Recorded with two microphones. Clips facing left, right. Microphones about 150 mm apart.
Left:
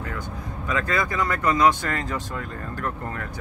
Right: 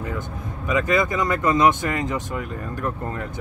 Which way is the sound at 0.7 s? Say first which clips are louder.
Right 5 dB; 20° right (ahead or behind).